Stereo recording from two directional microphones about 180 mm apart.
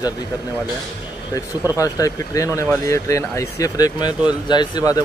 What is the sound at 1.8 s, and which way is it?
Speech, 20° left (ahead or behind).